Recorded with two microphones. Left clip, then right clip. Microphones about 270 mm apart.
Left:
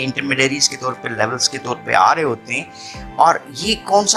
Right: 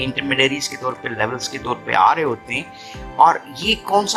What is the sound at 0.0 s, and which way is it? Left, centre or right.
Speech, centre.